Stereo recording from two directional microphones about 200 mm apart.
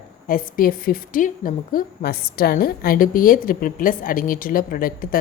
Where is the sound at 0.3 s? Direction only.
45° left (ahead or behind).